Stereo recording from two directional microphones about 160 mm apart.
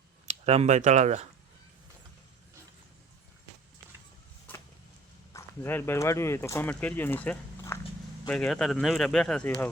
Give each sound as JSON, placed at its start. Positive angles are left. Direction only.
{"t": 0.3, "sound": "speech", "side_deg": -40}
{"t": 5.3, "sound": "speech", "side_deg": 15}